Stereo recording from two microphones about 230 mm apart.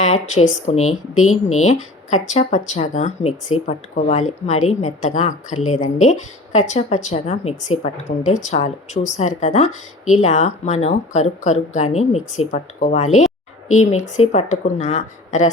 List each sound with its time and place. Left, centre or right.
0.0 s speech: left
0.8 s speech: left
1.6 s speech: left
14.2 s speech: left